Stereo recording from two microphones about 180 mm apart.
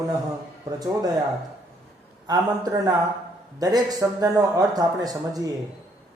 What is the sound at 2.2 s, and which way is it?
Speech, 20° right (ahead or behind).